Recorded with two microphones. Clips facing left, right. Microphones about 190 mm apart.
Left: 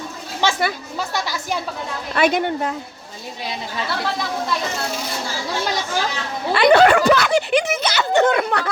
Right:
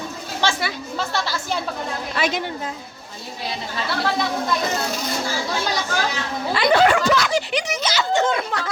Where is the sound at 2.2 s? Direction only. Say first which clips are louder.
Left 7 dB; 55° left (ahead or behind).